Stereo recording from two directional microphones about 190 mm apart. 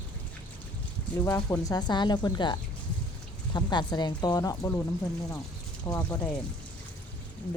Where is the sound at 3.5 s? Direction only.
25° left (ahead or behind).